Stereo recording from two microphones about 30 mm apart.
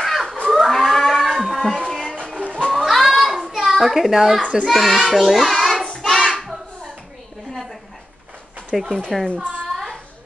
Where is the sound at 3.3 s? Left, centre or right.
Centre.